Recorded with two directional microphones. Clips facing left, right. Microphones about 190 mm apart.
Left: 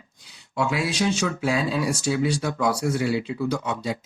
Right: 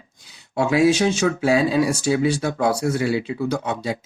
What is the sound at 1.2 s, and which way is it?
Speech, 50° right (ahead or behind).